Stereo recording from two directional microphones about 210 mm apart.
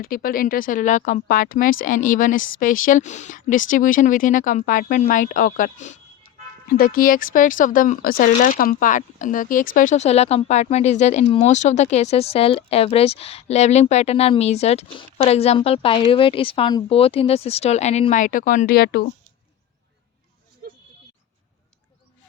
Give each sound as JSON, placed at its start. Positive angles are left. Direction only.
{"t": 0.0, "sound": "speech", "side_deg": 45}